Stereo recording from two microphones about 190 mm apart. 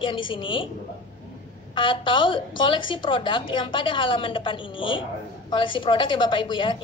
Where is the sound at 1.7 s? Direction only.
25° left (ahead or behind).